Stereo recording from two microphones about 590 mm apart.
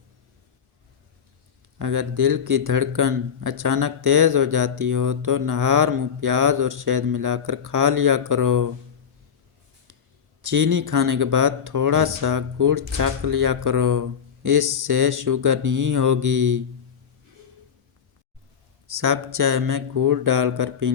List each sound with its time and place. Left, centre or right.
1.8 s speech: right
10.4 s speech: right
18.9 s speech: right